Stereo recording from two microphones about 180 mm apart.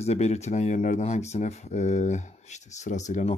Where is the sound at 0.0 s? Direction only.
35° left (ahead or behind).